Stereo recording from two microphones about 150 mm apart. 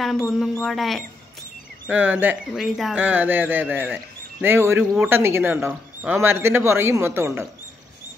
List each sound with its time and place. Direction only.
0.0 s speech: centre (ahead or behind)
1.9 s speech: 10° right (ahead or behind)